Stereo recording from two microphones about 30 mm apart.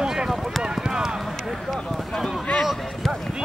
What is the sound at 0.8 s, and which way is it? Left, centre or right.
Run, right.